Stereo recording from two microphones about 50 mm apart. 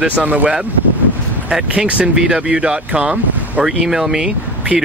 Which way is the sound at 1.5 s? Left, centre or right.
Centre.